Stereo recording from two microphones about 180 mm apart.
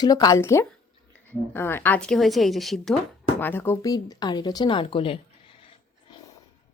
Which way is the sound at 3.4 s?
10° left (ahead or behind).